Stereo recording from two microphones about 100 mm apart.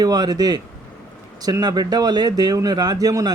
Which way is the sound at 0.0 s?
40° right (ahead or behind).